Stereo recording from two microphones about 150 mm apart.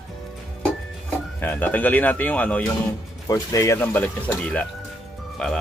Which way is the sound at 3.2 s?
20° left (ahead or behind).